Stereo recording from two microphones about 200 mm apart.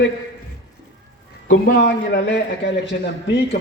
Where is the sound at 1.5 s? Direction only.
60° left (ahead or behind).